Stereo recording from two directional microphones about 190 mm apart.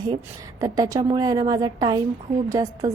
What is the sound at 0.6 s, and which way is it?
A woman's voice, 20° right (ahead or behind).